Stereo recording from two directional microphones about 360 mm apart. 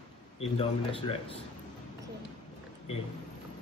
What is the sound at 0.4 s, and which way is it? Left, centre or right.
Speech, centre.